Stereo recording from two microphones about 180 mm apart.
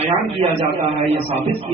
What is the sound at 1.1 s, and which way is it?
Speech, 35° right (ahead or behind).